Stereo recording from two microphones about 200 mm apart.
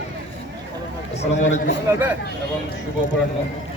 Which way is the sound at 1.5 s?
35° left (ahead or behind).